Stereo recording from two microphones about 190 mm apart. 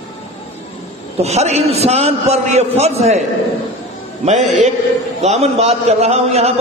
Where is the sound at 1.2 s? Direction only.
35° right (ahead or behind).